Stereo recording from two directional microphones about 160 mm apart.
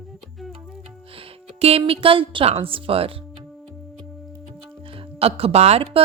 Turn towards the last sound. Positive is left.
turn(degrees=-40)  # may be behind; listen again after turning